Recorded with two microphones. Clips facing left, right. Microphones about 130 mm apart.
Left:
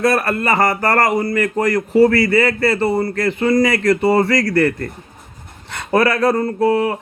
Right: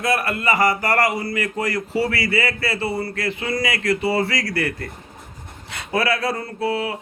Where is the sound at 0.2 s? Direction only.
55° left (ahead or behind).